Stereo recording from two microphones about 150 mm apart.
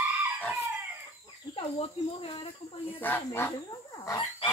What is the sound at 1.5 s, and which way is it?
Goose, 40° left (ahead or behind).